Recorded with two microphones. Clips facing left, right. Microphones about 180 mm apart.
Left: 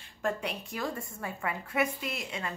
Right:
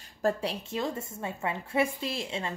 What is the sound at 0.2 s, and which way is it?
A woman's voice, 30° right (ahead or behind).